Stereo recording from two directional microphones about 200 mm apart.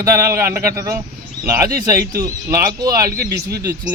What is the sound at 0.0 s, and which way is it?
Speech, 15° right (ahead or behind).